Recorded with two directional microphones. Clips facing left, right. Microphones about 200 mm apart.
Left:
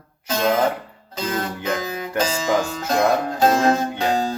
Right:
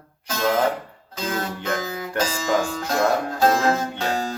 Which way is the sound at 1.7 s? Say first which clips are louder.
Left 2 dB; 15° left (ahead or behind).